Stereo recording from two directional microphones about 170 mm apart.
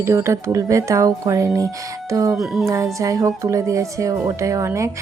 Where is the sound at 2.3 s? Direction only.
Centre (ahead or behind).